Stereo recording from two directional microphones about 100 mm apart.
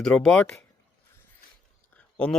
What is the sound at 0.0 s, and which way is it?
Speech, 5° left (ahead or behind).